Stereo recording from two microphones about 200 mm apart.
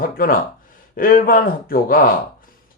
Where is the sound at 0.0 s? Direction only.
45° left (ahead or behind).